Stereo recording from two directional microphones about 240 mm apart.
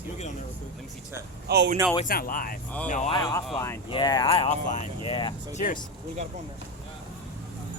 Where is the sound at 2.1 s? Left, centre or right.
Left.